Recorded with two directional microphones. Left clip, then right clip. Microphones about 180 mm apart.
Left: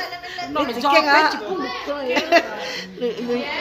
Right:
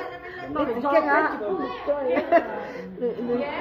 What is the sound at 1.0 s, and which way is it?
Speech, 20° left (ahead or behind).